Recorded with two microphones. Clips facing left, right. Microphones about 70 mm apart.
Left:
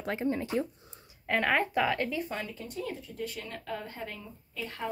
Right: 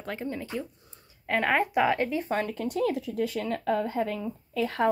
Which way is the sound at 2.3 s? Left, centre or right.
Right.